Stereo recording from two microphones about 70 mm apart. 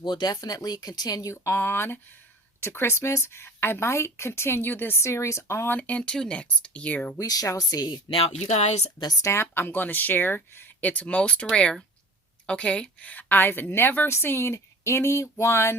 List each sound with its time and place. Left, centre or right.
0.0 s speech: left
1.3 s speech: left
5.7 s a woman's voice: left
6.0 s speech: centre
7.2 s speech: left
9.2 s speech: left
10.8 s a woman's voice: left